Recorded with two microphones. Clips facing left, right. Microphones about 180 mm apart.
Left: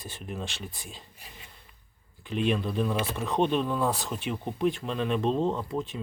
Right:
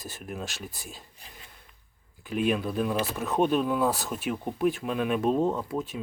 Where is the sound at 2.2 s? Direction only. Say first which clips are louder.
Right 1 dB; 5° right (ahead or behind).